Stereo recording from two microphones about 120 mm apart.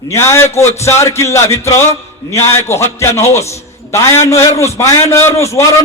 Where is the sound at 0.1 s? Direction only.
25° left (ahead or behind).